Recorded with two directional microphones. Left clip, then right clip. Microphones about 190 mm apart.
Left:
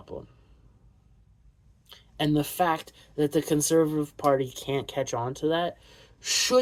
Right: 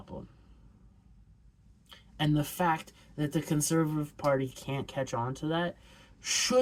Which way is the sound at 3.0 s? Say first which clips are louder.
Left 9 dB; 20° right (ahead or behind).